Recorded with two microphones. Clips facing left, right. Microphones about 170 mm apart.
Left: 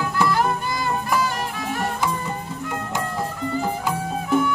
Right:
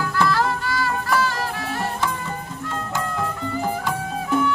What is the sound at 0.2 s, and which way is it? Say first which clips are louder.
Music: even; 20° left (ahead or behind).